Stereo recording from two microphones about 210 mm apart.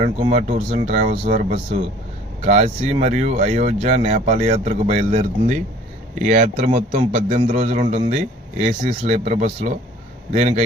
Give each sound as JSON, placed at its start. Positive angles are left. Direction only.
{"t": 0.0, "sound": "a man's voice", "side_deg": -30}